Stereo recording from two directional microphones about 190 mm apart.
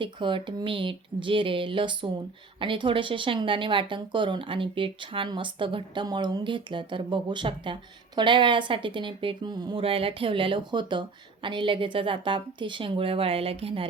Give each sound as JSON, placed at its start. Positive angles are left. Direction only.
{"t": 0.0, "sound": "speech", "side_deg": -25}